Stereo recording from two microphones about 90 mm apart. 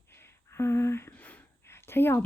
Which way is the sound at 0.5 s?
30° left (ahead or behind).